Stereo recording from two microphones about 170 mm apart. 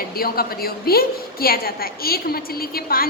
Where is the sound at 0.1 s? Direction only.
60° left (ahead or behind).